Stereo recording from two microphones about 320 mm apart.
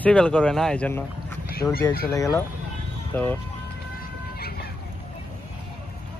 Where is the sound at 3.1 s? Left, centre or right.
Centre.